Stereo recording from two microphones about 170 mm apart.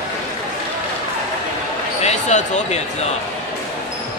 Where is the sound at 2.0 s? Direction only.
45° left (ahead or behind).